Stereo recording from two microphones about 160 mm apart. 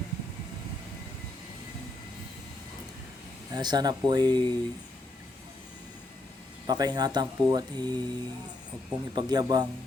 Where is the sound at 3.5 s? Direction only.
25° right (ahead or behind).